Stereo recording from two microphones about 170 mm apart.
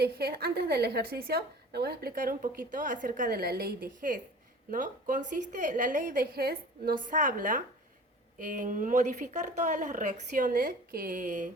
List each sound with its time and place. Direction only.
0.0 s a woman's voice: 65° right (ahead or behind); by 11.4 s 50° right (ahead or behind)